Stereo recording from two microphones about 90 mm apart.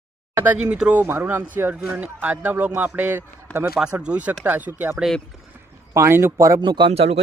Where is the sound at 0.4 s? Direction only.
20° right (ahead or behind).